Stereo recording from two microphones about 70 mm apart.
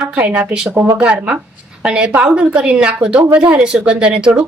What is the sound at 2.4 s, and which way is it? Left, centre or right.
Speech, centre.